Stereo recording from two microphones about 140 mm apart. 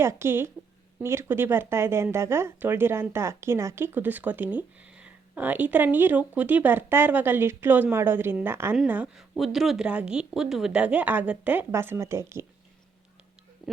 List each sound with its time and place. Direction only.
0.0 s speech: 20° right (ahead or behind)